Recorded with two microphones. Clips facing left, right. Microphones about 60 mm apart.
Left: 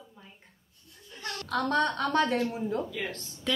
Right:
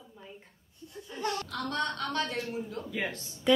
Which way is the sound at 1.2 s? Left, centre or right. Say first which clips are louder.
Right 6 dB; right.